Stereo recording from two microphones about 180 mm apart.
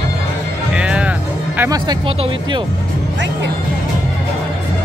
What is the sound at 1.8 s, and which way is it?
Speech, 25° right (ahead or behind).